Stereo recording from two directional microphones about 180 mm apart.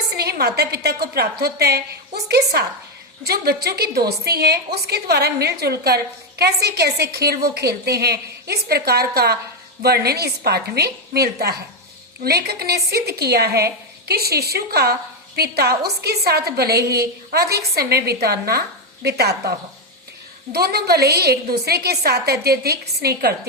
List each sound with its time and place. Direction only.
0.1 s a woman's voice: 60° right (ahead or behind)